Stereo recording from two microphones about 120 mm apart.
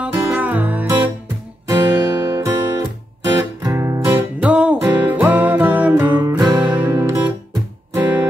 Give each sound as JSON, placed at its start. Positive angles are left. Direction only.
{"t": 0.0, "sound": "music", "side_deg": -15}
{"t": 1.7, "sound": "music", "side_deg": -30}
{"t": 4.4, "sound": "music", "side_deg": -10}
{"t": 6.2, "sound": "music", "side_deg": -30}
{"t": 6.6, "sound": "music", "side_deg": -10}